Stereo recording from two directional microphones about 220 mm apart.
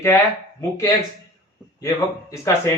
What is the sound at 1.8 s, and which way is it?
Speech, 15° left (ahead or behind).